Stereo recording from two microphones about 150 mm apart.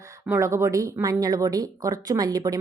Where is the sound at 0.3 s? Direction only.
20° right (ahead or behind).